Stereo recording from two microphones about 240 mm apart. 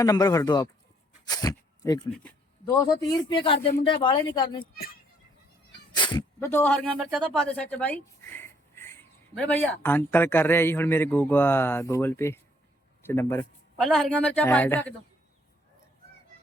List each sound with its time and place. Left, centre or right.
0.0 s a man's voice: centre
2.0 s a sound: centre
2.8 s a man's voice: centre
4.6 s a child's voice: left
5.9 s a man's voice: centre